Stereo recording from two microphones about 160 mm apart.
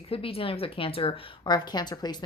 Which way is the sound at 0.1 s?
35° left (ahead or behind).